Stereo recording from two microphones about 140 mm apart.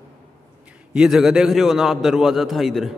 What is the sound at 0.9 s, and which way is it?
A man's voice, 5° right (ahead or behind).